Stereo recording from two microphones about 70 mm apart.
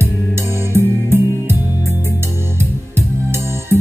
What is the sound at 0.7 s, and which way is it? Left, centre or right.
Music, right.